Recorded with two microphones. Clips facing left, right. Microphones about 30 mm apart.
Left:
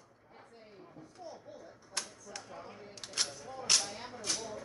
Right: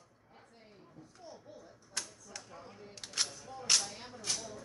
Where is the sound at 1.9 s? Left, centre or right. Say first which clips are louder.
Left 1 dB; centre.